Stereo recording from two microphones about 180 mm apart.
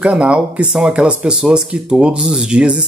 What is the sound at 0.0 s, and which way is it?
Speech, 5° right (ahead or behind).